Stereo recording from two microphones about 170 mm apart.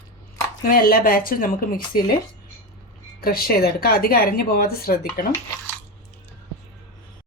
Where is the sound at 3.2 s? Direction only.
60° left (ahead or behind).